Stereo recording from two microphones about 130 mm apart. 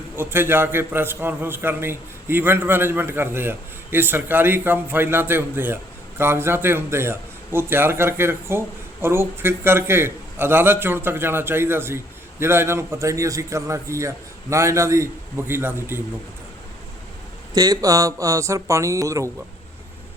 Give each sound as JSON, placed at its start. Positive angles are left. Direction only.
{"t": 0.2, "sound": "a man's voice", "side_deg": -15}
{"t": 17.5, "sound": "speech", "side_deg": -30}